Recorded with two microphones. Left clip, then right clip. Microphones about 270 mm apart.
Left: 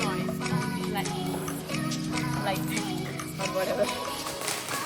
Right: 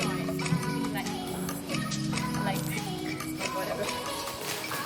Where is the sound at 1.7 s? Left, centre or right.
Centre.